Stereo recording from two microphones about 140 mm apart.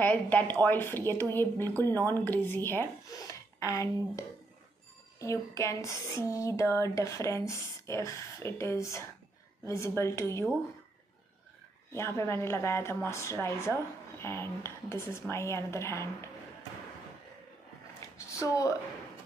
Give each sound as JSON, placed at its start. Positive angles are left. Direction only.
{"t": 0.0, "sound": "speech", "side_deg": 15}
{"t": 11.9, "sound": "speech", "side_deg": 20}
{"t": 18.0, "sound": "a woman's voice", "side_deg": 25}